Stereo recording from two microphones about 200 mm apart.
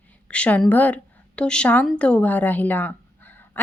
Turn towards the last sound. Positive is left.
turn(degrees=10)  # may be behind; listen again after turning